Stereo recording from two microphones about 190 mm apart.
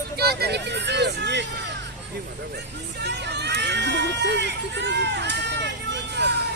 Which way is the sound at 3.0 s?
60° right (ahead or behind).